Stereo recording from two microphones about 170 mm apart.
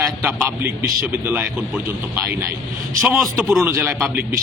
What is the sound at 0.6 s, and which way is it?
A man's voice, 15° right (ahead or behind).